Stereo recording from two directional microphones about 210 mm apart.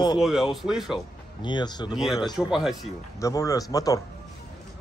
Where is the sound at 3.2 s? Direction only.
15° left (ahead or behind).